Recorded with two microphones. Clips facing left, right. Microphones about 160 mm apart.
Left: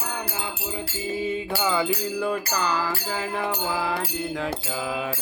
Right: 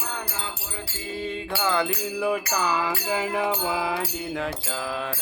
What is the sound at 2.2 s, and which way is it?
Music, 10° right (ahead or behind).